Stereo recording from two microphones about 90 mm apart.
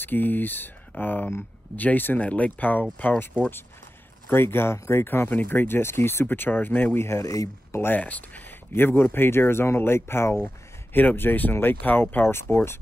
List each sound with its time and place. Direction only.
0.0 s speech: 20° left (ahead or behind)
4.3 s speech: 25° left (ahead or behind)
7.8 s speech: 20° left (ahead or behind)